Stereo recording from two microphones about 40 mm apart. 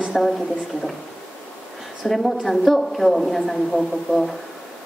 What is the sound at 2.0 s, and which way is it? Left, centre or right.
A woman's voice, centre.